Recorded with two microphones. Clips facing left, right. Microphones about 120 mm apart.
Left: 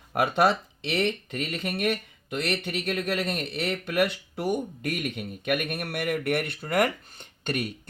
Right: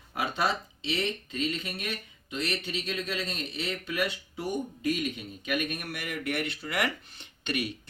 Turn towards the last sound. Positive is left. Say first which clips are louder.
# left 2 dB
turn(degrees=50)  # may be behind; listen again after turning